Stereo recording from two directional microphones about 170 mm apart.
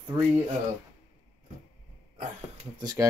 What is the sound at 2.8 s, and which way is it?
Speech, 20° right (ahead or behind).